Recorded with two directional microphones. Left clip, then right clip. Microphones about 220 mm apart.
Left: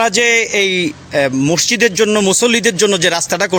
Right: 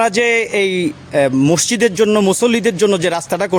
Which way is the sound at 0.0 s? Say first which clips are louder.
Left 2 dB; 5° right (ahead or behind).